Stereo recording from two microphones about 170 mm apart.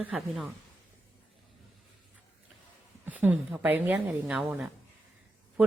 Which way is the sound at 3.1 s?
10° right (ahead or behind).